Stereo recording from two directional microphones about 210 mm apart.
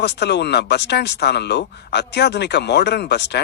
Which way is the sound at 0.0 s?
55° left (ahead or behind).